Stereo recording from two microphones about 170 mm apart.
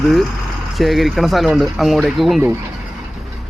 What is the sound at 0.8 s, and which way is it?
Speech, centre (ahead or behind).